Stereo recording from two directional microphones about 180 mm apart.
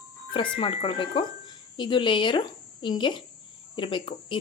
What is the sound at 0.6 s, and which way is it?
Speech, 30° left (ahead or behind).